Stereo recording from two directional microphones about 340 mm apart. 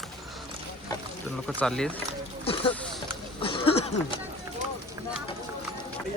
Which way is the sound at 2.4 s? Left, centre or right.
Centre.